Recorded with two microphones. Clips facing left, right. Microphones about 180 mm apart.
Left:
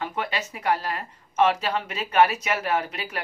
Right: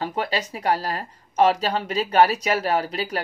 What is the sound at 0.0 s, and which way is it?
Speech, 35° right (ahead or behind).